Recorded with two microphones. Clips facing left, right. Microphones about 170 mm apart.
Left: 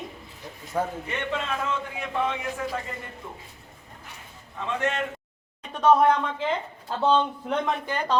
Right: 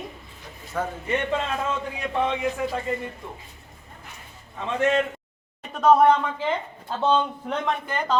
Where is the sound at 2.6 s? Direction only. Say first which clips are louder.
Right 4 dB; 15° right (ahead or behind).